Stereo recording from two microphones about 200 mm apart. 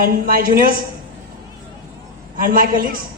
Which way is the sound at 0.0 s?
45° right (ahead or behind).